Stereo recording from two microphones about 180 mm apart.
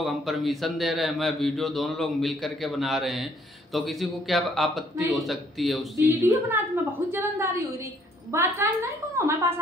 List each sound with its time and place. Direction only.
0.0 s speech: centre (ahead or behind)
6.0 s a woman's voice: 15° right (ahead or behind)